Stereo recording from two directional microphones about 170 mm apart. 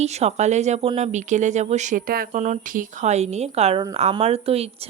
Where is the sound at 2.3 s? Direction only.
45° right (ahead or behind).